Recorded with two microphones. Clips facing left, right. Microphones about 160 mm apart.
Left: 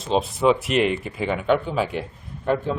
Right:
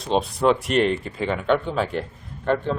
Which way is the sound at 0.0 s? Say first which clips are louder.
Even; centre (ahead or behind).